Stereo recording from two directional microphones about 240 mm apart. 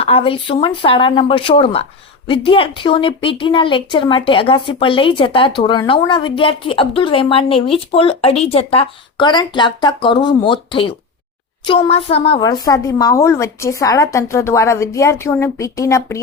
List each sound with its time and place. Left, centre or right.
0.0 s a woman's voice: left